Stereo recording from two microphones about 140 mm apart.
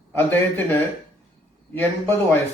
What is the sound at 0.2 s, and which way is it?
Speech, 15° left (ahead or behind).